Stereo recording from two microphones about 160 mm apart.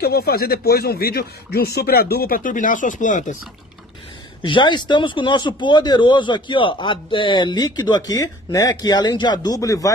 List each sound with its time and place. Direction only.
0.0 s speech: 80° left; by 3.3 s 50° left (ahead or behind)
4.5 s speech: 30° left (ahead or behind)